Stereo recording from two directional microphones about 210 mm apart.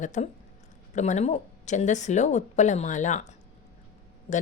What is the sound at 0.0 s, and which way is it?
A woman's voice, 35° left (ahead or behind).